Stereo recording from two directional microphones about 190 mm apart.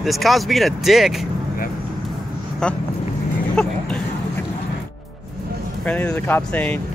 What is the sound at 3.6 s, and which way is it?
Speech, 5° left (ahead or behind).